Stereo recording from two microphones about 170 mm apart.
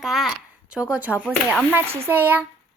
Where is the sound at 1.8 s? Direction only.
35° right (ahead or behind).